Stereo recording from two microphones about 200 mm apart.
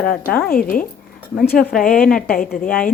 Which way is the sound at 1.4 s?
5° left (ahead or behind).